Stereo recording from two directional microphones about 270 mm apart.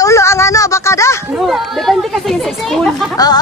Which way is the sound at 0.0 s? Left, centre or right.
Centre.